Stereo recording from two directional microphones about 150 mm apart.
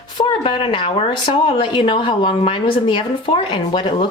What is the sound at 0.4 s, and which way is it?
A woman's voice, 35° left (ahead or behind).